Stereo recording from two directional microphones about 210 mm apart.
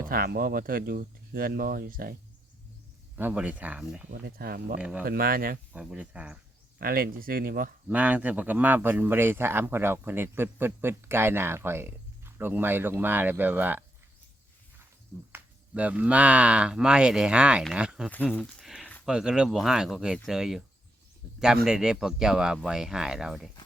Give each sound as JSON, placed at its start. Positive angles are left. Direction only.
{"t": 0.0, "sound": "speech", "side_deg": -45}
{"t": 3.2, "sound": "speech", "side_deg": -10}
{"t": 4.1, "sound": "speech", "side_deg": -50}
{"t": 4.8, "sound": "speech", "side_deg": -5}
{"t": 5.0, "sound": "speech", "side_deg": -45}
{"t": 5.7, "sound": "speech", "side_deg": -5}
{"t": 6.7, "sound": "speech", "side_deg": -45}
{"t": 7.9, "sound": "speech", "side_deg": -5}
{"t": 15.3, "sound": "speech", "side_deg": -5}
{"t": 18.1, "sound": "speech", "side_deg": 5}
{"t": 18.3, "sound": "a sound", "side_deg": 0}
{"t": 19.1, "sound": "speech", "side_deg": -5}